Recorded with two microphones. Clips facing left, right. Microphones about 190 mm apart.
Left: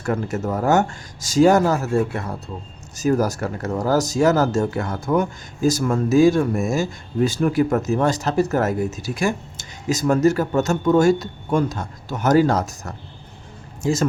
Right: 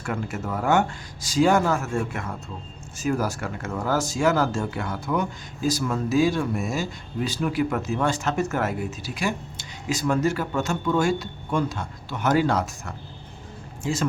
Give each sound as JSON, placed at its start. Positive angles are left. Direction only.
{"t": 0.0, "sound": "speech", "side_deg": 40}